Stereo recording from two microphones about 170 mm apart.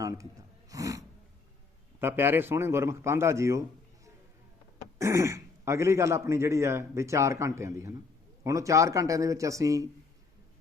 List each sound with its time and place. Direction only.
0.0 s speech: 20° right (ahead or behind)
0.7 s a sound: 20° right (ahead or behind)
2.0 s speech: 15° right (ahead or behind)
4.9 s a man's voice: 15° right (ahead or behind)